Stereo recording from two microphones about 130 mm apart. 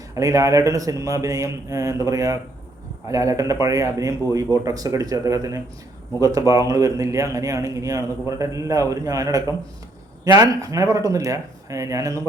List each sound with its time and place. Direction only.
0.2 s a man's voice: 25° right (ahead or behind)